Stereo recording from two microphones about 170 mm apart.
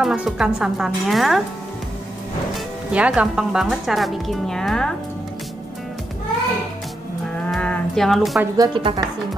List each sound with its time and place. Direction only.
0.0 s speech: 5° right (ahead or behind)
2.5 s speech: 5° right (ahead or behind)
7.4 s a sound: 5° left (ahead or behind)
8.5 s a woman's voice: 25° right (ahead or behind)